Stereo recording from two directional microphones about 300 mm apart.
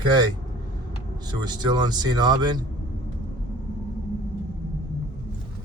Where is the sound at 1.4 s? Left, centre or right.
Centre.